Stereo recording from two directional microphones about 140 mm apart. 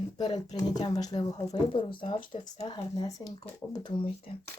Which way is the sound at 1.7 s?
40° left (ahead or behind).